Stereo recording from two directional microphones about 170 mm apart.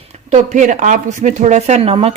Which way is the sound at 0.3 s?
45° right (ahead or behind).